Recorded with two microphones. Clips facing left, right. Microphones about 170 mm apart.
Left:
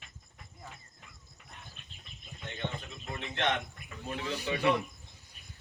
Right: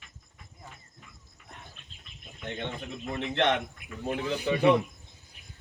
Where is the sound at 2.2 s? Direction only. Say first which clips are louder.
Right 3 dB; 65° right (ahead or behind).